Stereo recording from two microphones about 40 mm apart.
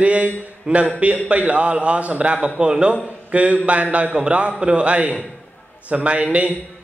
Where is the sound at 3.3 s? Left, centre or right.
Right.